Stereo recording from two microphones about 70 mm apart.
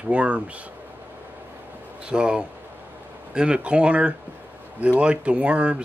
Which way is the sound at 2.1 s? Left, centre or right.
Centre.